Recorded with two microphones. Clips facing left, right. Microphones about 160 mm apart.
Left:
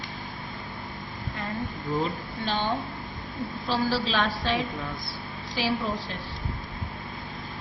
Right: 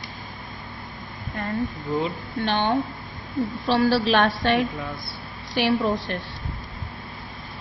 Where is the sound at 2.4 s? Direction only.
65° right (ahead or behind).